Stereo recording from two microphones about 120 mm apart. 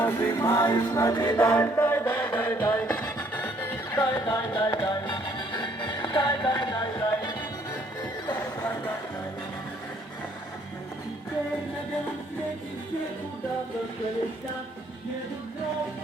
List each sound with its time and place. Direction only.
0.0 s music: 20° left (ahead or behind)
1.4 s music: 20° left (ahead or behind)
3.9 s music: 30° left (ahead or behind)
8.3 s music: 15° left (ahead or behind)